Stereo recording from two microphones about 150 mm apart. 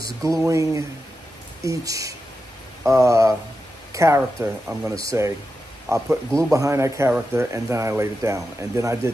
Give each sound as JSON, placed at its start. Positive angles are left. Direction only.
{"t": 0.0, "sound": "speech", "side_deg": -20}